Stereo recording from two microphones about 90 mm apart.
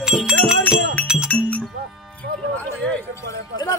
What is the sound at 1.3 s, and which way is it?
Music, 15° left (ahead or behind).